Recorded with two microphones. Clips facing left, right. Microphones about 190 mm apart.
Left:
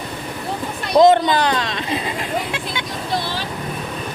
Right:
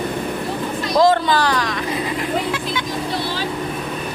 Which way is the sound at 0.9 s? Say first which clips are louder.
Left 3 dB; 20° left (ahead or behind).